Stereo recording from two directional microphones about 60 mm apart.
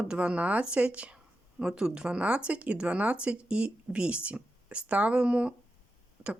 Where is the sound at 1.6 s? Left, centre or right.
Centre.